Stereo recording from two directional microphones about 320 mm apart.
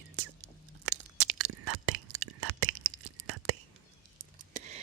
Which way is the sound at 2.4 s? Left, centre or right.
Right.